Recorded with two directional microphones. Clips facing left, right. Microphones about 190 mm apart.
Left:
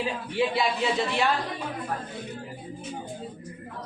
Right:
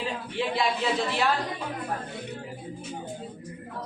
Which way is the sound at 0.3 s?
Centre (ahead or behind).